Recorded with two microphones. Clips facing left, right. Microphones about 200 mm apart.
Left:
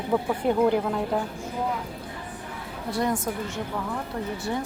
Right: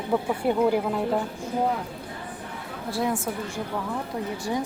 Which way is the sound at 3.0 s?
10° right (ahead or behind).